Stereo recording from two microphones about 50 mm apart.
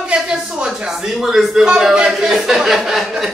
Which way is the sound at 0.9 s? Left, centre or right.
Centre.